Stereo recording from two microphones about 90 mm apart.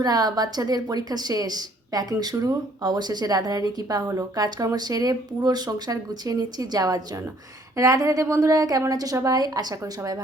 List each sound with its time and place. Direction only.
0.0 s a woman's voice: 45° right (ahead or behind)
2.8 s a woman's voice: 50° right (ahead or behind)